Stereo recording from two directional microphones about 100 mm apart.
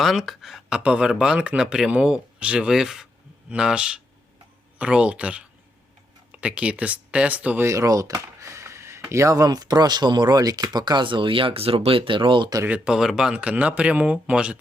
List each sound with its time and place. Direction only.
0.0 s speech: 5° right (ahead or behind)
7.7 s speech: 35° right (ahead or behind)
12.6 s speech: 10° right (ahead or behind)